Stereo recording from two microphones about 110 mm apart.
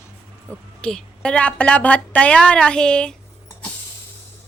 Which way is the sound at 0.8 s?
10° left (ahead or behind).